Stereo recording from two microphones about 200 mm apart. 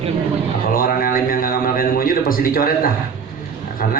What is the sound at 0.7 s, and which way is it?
A man's voice, 45° left (ahead or behind).